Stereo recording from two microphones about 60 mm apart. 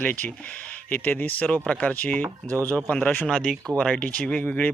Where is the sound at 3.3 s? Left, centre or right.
Centre; by 4.7 s left.